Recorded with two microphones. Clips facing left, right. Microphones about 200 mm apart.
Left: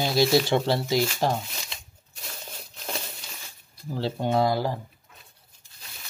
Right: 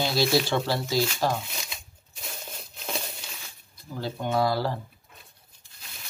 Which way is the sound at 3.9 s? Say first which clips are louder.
Left 3 dB; 30° left (ahead or behind).